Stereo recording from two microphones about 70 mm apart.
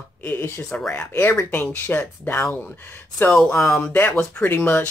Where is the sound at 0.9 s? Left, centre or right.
Left.